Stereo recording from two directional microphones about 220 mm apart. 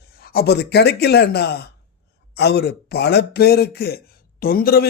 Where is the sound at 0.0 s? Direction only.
45° left (ahead or behind).